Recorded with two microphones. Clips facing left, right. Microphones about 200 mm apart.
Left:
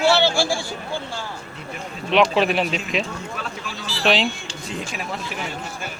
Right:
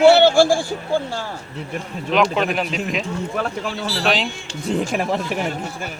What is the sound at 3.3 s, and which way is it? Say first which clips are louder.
Speech: right 8 dB; 60° right (ahead or behind).